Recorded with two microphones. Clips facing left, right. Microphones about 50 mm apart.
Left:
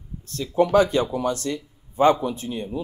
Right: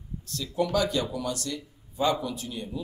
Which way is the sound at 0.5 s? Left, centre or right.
Left.